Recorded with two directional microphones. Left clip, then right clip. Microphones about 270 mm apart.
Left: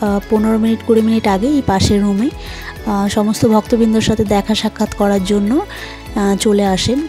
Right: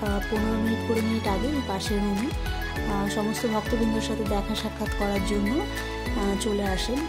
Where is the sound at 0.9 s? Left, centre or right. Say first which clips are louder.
Left 16 dB; left.